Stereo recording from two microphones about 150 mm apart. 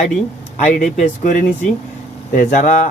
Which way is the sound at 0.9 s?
60° left (ahead or behind).